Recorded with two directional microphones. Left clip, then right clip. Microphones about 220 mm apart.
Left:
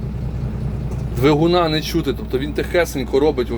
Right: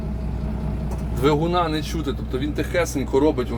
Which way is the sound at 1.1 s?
20° left (ahead or behind).